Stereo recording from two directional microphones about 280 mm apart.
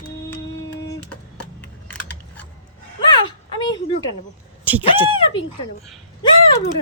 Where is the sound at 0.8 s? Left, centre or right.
Centre.